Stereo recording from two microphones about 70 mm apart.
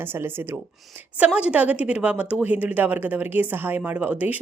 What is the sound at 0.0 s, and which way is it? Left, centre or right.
Speech, right.